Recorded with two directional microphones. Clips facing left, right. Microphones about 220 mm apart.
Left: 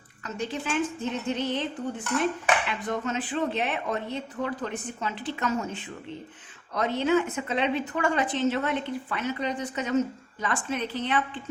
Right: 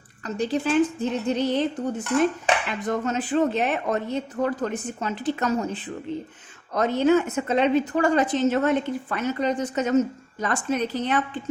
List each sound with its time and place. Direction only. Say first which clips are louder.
0.3 s a woman's voice: right 8 dB; 35° right (ahead or behind)